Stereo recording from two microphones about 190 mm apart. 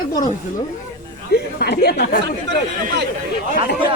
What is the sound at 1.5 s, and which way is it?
Speech, 60° left (ahead or behind).